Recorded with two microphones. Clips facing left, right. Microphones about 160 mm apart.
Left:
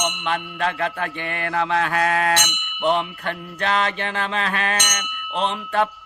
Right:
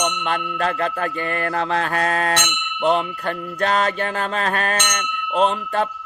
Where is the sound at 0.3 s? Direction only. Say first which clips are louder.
Right 2 dB; 40° right (ahead or behind).